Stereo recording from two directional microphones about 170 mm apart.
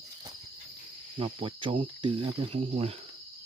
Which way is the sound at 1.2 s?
30° right (ahead or behind).